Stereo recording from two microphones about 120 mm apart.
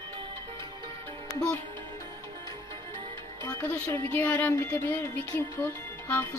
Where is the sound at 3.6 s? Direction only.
15° left (ahead or behind).